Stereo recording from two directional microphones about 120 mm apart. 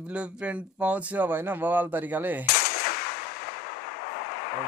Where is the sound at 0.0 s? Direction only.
10° right (ahead or behind).